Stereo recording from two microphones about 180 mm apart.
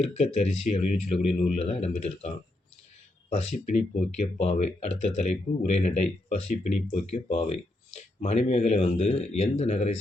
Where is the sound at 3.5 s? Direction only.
40° left (ahead or behind).